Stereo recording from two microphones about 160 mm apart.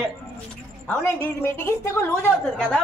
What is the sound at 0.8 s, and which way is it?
A woman's voice, 15° left (ahead or behind).